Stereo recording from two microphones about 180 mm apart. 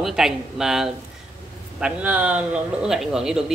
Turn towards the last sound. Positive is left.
turn(degrees=0)  # may be behind; listen again after turning